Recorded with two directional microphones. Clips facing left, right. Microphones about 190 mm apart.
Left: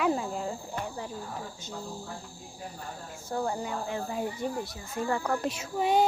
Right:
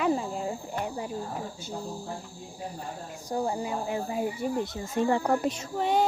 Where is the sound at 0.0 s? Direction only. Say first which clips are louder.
Right 1 dB; centre (ahead or behind).